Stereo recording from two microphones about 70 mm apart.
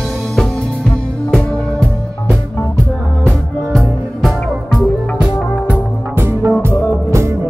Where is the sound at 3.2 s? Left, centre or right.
Centre.